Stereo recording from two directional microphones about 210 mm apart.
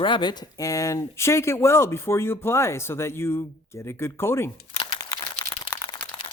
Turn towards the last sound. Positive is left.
turn(degrees=10)  # may be behind; listen again after turning